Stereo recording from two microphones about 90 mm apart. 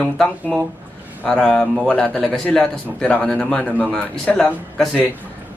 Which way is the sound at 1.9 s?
10° left (ahead or behind).